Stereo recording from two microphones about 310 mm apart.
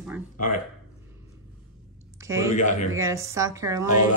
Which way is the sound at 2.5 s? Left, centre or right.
Left.